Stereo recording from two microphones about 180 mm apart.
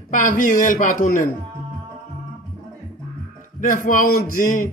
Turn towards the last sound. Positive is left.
turn(degrees=50)  # may be behind; listen again after turning